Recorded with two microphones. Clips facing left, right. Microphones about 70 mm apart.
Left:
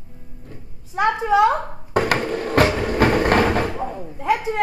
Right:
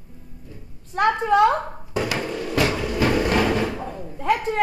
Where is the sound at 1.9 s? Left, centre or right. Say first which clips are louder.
Left 5 dB; left.